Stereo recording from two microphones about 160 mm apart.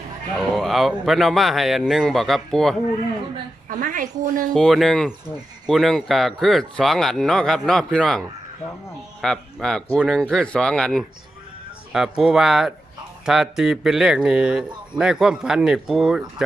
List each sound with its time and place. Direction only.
0.3 s speech: centre (ahead or behind)
3.7 s a woman's voice: 55° right (ahead or behind)
4.5 s speech: centre (ahead or behind)